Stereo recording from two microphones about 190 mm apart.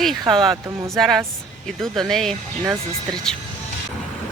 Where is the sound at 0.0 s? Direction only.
Centre (ahead or behind).